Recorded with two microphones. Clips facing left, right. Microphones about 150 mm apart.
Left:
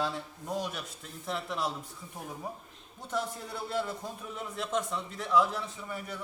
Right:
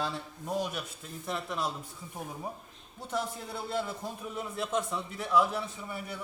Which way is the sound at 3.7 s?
5° right (ahead or behind).